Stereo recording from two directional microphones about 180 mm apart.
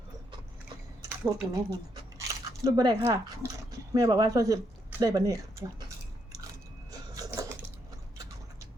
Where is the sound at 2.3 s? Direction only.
20° right (ahead or behind).